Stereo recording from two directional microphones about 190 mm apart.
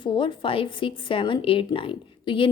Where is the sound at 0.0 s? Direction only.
25° left (ahead or behind).